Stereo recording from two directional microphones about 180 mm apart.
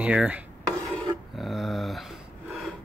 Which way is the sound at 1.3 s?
Centre (ahead or behind).